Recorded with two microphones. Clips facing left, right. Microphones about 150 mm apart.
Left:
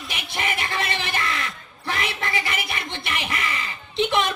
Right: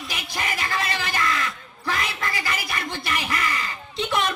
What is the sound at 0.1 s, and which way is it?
Music, 25° left (ahead or behind).